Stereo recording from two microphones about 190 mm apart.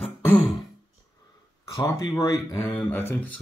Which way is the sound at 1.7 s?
20° left (ahead or behind).